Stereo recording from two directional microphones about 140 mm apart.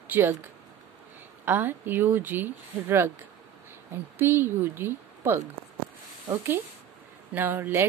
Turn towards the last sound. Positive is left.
turn(degrees=-15)  # may be behind; listen again after turning